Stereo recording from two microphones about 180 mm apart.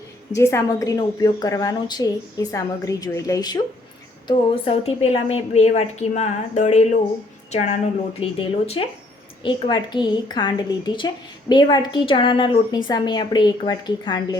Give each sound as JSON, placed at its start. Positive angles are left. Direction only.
{"t": 0.3, "sound": "a woman's voice", "side_deg": 15}
{"t": 4.3, "sound": "a woman's voice", "side_deg": 30}
{"t": 8.2, "sound": "a woman's voice", "side_deg": 35}